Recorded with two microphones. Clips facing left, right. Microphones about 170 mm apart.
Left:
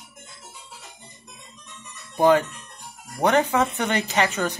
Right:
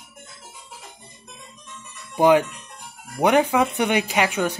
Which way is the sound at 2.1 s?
15° right (ahead or behind).